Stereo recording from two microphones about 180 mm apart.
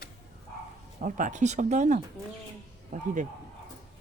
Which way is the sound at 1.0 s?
45° right (ahead or behind).